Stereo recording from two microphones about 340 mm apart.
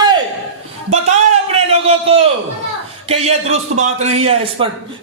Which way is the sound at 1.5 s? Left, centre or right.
Centre.